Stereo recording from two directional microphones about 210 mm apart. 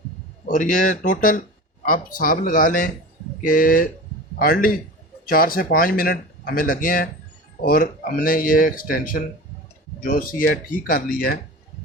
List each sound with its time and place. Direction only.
0.4 s speech: 40° left (ahead or behind)